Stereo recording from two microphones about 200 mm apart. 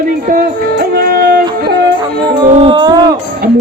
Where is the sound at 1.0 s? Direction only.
45° right (ahead or behind).